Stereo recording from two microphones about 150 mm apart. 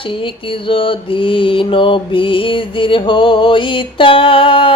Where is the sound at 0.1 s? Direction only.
35° left (ahead or behind).